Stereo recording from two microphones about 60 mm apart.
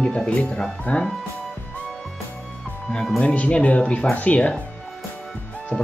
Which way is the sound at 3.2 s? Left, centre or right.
Left.